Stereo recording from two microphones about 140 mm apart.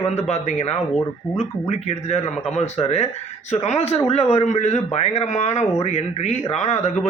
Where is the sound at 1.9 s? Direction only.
50° left (ahead or behind).